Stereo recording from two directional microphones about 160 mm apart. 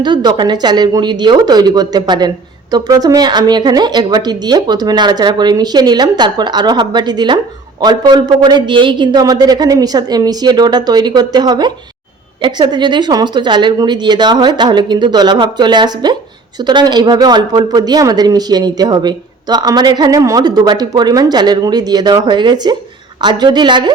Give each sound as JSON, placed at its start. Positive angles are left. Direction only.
{"t": 0.0, "sound": "speech", "side_deg": -25}